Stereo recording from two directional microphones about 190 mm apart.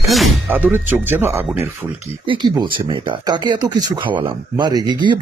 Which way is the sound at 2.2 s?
25° right (ahead or behind).